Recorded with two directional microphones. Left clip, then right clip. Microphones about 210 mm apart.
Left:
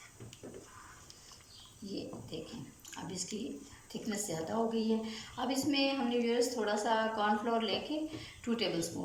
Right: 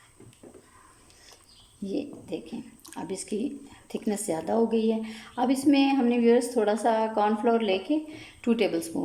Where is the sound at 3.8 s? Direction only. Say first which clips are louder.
Right 9 dB; 55° right (ahead or behind).